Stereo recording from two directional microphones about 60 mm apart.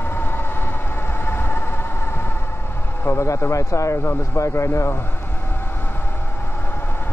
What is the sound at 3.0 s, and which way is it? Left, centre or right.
Speech, left.